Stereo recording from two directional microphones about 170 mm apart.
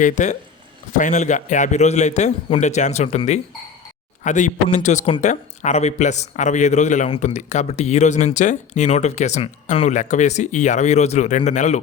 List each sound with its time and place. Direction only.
0.0 s speech: 45° left (ahead or behind)